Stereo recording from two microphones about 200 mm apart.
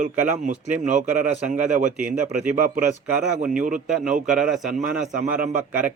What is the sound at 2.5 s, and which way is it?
Speech, 45° right (ahead or behind).